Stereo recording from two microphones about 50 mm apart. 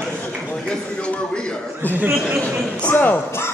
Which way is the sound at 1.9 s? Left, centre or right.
Right.